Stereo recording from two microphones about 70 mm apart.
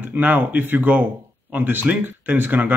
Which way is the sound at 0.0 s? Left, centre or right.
Right.